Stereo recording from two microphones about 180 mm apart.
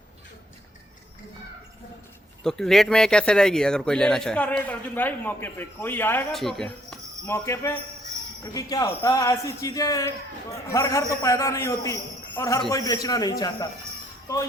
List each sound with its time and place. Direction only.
2.4 s speech: 5° left (ahead or behind)
6.3 s speech: centre (ahead or behind)
7.3 s a man's voice: 15° left (ahead or behind)